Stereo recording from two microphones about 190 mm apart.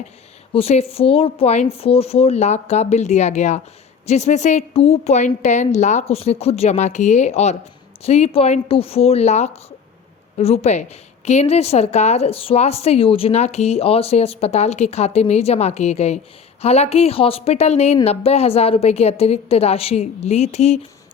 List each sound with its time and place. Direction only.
0.5 s a woman's voice: 30° left (ahead or behind)